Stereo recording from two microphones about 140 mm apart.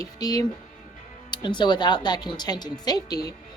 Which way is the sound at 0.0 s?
25° left (ahead or behind).